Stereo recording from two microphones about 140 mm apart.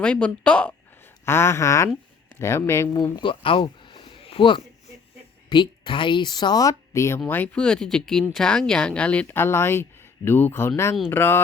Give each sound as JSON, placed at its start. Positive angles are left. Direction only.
{"t": 0.0, "sound": "speech", "side_deg": 10}
{"t": 1.2, "sound": "a sound", "side_deg": 20}
{"t": 2.3, "sound": "speech", "side_deg": 20}